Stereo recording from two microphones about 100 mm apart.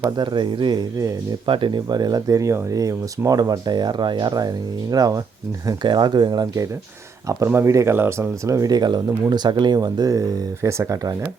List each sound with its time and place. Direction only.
0.2 s speech: 50° right (ahead or behind)
1.5 s speech: 55° right (ahead or behind); by 5.2 s 40° right (ahead or behind)
5.8 s speech: 50° right (ahead or behind); by 11.1 s 35° right (ahead or behind)